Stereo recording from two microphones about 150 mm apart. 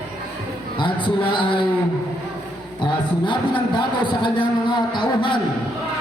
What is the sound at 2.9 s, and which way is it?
Speech, 30° left (ahead or behind).